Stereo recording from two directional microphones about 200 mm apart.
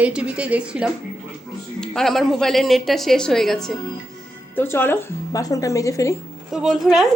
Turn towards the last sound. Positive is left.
turn(degrees=0)  # may be behind; listen again after turning